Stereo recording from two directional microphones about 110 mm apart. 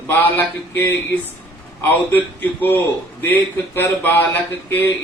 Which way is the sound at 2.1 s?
15° left (ahead or behind).